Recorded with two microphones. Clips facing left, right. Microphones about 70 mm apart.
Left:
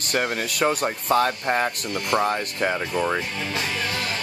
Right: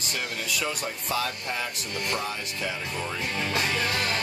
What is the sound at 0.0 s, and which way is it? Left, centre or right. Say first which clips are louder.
Speech: left 8 dB; left.